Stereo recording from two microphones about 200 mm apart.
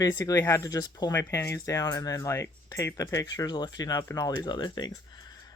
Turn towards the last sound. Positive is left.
turn(degrees=20)  # may be behind; listen again after turning